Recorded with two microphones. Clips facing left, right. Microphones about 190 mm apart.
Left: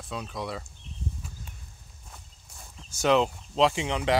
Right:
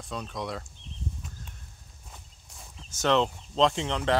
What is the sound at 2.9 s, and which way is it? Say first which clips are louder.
Speech: left 2 dB; 10° left (ahead or behind).